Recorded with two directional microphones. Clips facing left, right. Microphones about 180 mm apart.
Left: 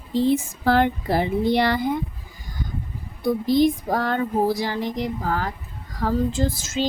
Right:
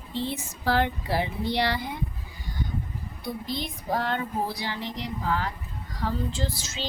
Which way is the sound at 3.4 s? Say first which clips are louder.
Left 14 dB; 45° left (ahead or behind).